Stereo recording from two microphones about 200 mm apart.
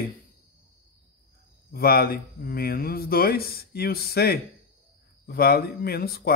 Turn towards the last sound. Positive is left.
turn(degrees=50)  # may be behind; listen again after turning